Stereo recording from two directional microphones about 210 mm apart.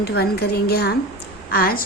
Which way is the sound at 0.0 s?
50° left (ahead or behind).